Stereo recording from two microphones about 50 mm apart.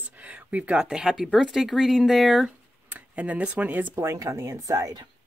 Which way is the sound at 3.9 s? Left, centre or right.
Right.